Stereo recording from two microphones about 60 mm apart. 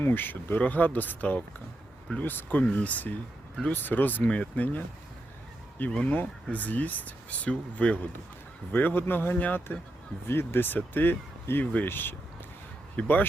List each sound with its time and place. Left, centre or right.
0.0 s speech: left
5.9 s speech: centre
8.7 s speech: left